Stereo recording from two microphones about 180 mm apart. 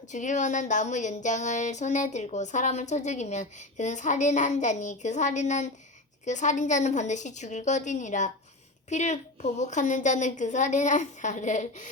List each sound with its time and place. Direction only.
0.1 s a woman's voice: 45° left (ahead or behind)